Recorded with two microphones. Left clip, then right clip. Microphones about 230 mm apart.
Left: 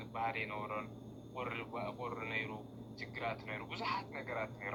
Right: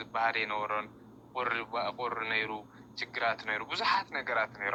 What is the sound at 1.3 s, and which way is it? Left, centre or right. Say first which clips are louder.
Speech: right 10 dB; right.